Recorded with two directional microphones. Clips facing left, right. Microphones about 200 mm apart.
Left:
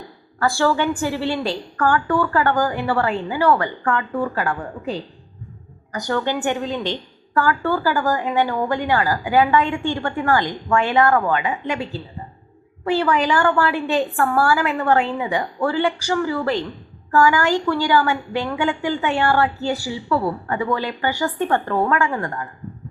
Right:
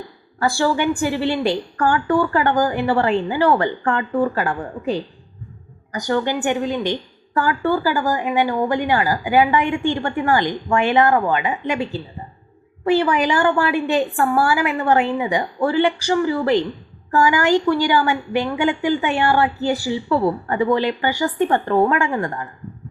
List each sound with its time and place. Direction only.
0.3 s a woman's voice: 15° right (ahead or behind)
5.9 s a woman's voice: 15° right (ahead or behind)